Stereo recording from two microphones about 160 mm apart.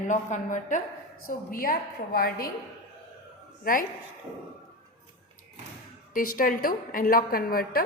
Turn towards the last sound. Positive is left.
turn(degrees=65)  # may be behind; listen again after turning